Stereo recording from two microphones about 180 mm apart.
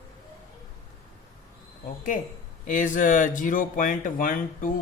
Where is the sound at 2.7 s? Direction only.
45° left (ahead or behind).